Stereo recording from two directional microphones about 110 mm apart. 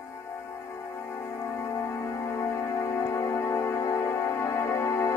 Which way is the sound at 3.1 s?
30° left (ahead or behind).